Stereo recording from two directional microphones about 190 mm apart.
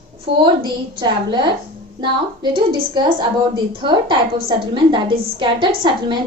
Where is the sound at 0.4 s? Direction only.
25° right (ahead or behind).